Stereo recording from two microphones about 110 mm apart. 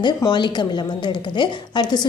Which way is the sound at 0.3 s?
45° left (ahead or behind).